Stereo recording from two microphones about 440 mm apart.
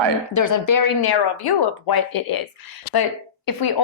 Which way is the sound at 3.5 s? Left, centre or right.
Left.